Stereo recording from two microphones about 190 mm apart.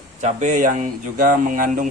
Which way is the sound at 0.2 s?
40° right (ahead or behind).